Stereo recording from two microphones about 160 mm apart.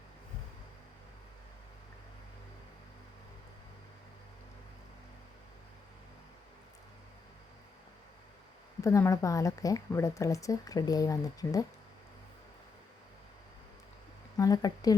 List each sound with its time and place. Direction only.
8.8 s speech: 20° left (ahead or behind)
14.3 s speech: 25° left (ahead or behind)